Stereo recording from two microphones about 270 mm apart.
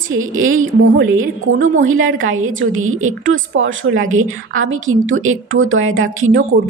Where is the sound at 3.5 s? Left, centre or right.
Right.